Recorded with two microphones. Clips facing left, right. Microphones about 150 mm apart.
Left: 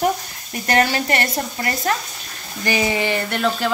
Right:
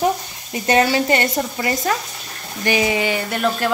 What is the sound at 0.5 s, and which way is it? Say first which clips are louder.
Speech: right 2 dB; 20° right (ahead or behind).